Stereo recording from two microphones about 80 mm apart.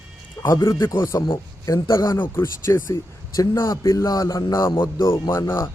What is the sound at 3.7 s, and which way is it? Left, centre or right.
Speech, left.